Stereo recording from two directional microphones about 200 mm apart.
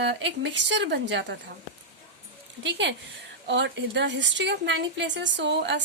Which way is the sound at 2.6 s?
60° right (ahead or behind).